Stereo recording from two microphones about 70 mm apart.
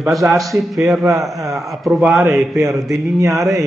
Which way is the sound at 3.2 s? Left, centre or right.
Right.